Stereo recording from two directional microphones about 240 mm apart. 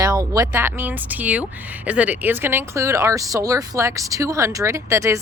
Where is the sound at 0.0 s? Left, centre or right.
Centre.